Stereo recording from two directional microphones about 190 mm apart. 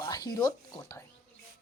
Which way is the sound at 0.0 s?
20° left (ahead or behind).